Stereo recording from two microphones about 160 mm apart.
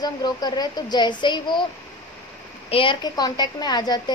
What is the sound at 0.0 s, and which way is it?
A woman's voice, 25° left (ahead or behind).